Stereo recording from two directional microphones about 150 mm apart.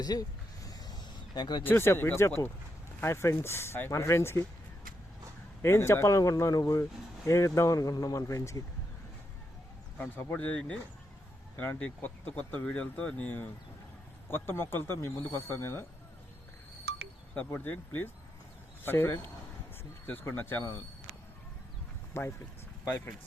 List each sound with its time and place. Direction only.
0.0 s vehicle: 25° left (ahead or behind)
1.4 s speech: 30° left (ahead or behind)
1.6 s speech: 15° left (ahead or behind)
5.6 s speech: 15° left (ahead or behind)
10.0 s speech: 15° left (ahead or behind)
16.9 s wind chime: 90° right
17.3 s speech: 10° left (ahead or behind)
22.1 s speech: 15° left (ahead or behind)